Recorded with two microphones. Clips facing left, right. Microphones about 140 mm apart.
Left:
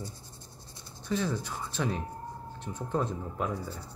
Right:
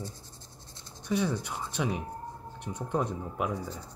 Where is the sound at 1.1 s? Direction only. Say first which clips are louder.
Right 2 dB; 15° right (ahead or behind).